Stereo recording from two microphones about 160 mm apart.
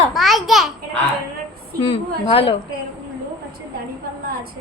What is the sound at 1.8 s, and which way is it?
Speech, 35° left (ahead or behind).